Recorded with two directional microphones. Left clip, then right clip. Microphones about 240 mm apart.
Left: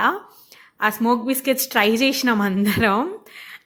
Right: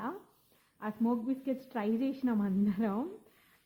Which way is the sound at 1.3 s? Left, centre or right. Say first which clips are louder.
Left 16 dB; centre.